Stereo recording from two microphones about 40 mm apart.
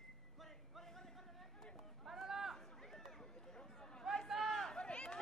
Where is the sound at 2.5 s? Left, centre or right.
Centre.